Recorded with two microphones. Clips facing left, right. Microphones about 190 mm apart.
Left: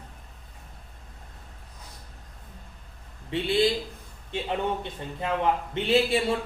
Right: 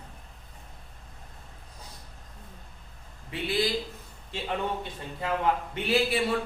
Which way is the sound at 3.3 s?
25° left (ahead or behind).